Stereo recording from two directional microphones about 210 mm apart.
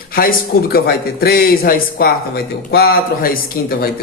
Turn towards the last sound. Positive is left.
turn(degrees=45)  # may be behind; listen again after turning